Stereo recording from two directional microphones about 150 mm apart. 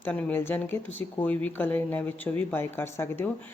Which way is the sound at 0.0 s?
10° left (ahead or behind).